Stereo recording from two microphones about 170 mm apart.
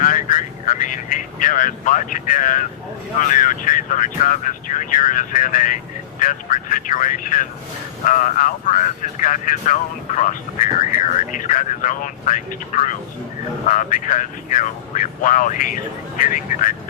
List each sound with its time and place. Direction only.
0.0 s speech: 50° left (ahead or behind)